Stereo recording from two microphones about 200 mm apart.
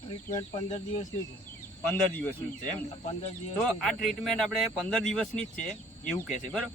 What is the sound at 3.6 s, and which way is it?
Speech, 5° left (ahead or behind).